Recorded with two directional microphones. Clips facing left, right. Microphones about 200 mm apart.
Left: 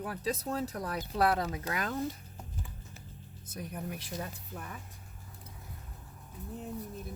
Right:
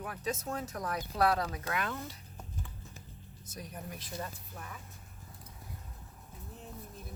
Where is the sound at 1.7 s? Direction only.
40° left (ahead or behind).